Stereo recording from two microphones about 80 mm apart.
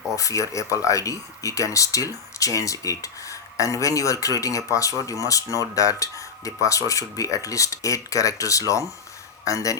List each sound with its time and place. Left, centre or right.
0.2 s speech: left